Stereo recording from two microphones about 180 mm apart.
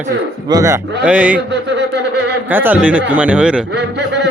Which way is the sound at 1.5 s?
70° right (ahead or behind).